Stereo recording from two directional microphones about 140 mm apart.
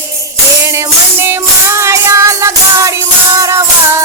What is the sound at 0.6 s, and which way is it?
Music, 20° right (ahead or behind).